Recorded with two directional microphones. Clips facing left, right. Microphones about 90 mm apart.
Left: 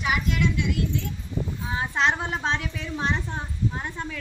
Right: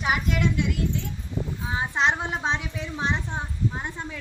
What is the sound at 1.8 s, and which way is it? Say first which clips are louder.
A woman's voice: even; 20° right (ahead or behind).